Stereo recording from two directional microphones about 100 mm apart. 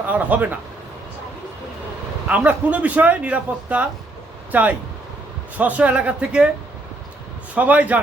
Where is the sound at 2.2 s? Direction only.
15° right (ahead or behind).